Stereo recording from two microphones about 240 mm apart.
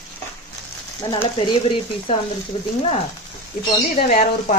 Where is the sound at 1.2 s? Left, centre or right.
Left.